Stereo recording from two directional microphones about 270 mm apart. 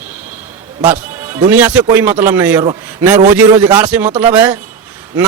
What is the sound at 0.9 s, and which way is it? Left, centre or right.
Music, centre.